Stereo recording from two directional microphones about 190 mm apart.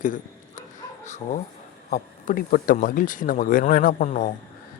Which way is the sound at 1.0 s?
40° left (ahead or behind).